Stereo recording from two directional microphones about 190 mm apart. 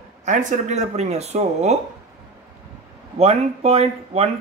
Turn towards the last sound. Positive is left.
turn(degrees=-30)  # may be behind; listen again after turning